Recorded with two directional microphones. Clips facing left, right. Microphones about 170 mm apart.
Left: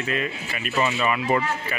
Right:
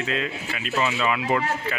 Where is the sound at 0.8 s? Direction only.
Centre (ahead or behind).